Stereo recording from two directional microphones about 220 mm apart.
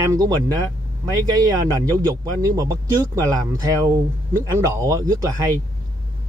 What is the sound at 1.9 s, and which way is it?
Speech, 15° right (ahead or behind).